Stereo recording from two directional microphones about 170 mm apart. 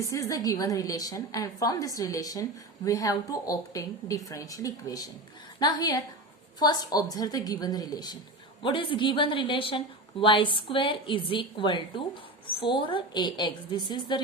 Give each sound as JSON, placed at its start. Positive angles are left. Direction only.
{"t": 0.0, "sound": "a woman's voice", "side_deg": 20}